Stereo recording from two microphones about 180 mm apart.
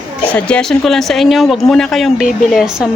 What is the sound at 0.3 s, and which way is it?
Speech, 5° left (ahead or behind).